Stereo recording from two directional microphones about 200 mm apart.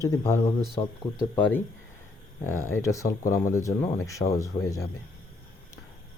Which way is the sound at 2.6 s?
15° left (ahead or behind).